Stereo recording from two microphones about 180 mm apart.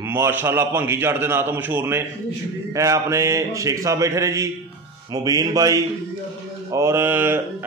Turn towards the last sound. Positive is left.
turn(degrees=-10)  # may be behind; listen again after turning